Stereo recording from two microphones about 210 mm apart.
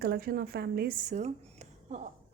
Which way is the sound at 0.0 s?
45° right (ahead or behind).